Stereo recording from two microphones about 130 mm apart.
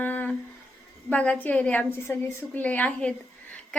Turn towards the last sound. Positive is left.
turn(degrees=10)  # may be behind; listen again after turning